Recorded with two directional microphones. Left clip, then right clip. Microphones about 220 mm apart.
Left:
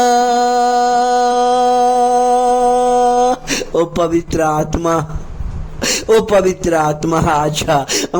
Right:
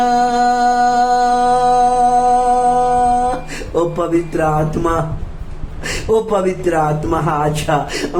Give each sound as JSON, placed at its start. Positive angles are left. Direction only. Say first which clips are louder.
{"t": 0.0, "sound": "music", "louder": "left 1 dB", "side_deg": 40}
{"t": 3.8, "sound": "speech", "louder": "even", "side_deg": 45}